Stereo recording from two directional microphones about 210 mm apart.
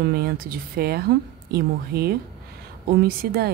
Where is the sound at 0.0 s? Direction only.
45° right (ahead or behind).